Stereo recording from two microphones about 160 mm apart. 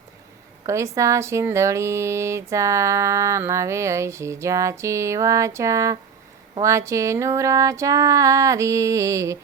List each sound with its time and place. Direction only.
0.6 s speech: 20° right (ahead or behind)